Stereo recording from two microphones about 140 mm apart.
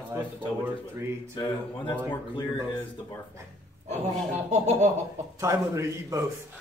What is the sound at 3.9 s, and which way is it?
Speech, 50° right (ahead or behind).